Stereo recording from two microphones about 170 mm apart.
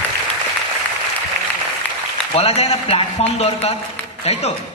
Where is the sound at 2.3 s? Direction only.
35° left (ahead or behind).